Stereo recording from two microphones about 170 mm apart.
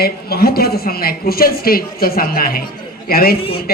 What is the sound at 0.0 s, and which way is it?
A woman's voice, 65° left (ahead or behind).